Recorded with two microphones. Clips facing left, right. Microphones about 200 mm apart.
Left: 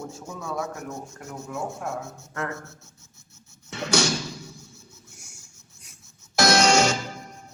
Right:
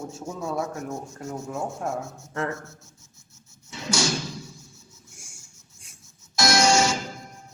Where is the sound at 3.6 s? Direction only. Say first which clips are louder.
Left 4 dB; 65° left (ahead or behind).